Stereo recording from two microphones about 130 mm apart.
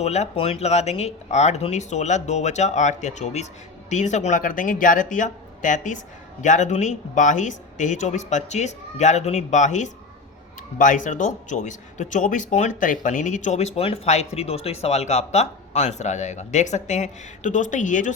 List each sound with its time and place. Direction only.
0.0 s speech: 55° left (ahead or behind)
10.8 s speech: 80° left